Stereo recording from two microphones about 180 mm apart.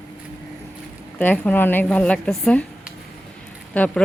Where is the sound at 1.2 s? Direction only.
5° left (ahead or behind).